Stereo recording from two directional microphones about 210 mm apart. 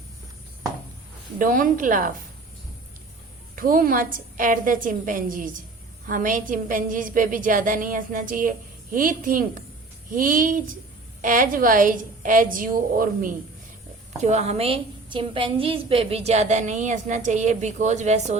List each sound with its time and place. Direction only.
1.4 s a woman's voice: 40° right (ahead or behind)
3.5 s a woman's voice: 40° right (ahead or behind)